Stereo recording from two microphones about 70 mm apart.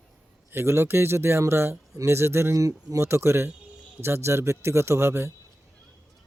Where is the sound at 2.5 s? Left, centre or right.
Right.